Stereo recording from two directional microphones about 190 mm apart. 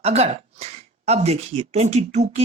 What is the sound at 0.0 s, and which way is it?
Speech, 35° right (ahead or behind).